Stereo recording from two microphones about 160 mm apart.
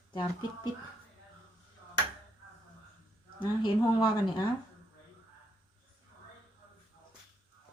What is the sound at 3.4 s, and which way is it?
Speech, 30° left (ahead or behind).